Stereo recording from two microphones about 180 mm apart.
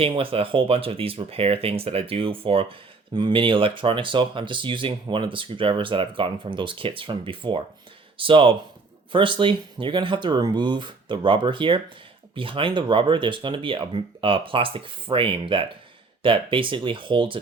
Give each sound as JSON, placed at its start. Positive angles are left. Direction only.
{"t": 0.0, "sound": "speech", "side_deg": -30}